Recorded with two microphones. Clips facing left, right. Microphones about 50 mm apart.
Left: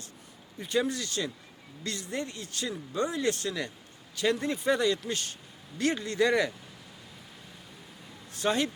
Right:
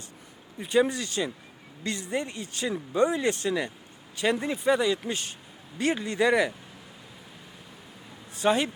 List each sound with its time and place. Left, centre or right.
0.6 s speech: right
8.3 s speech: centre